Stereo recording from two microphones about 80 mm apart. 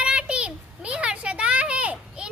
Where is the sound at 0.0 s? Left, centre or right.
Centre.